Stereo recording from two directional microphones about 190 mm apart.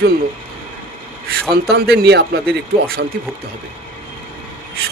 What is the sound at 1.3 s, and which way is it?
Speech, 55° right (ahead or behind).